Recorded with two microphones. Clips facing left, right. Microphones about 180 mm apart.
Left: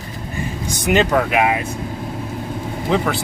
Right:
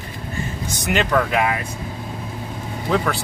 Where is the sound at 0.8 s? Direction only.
15° left (ahead or behind).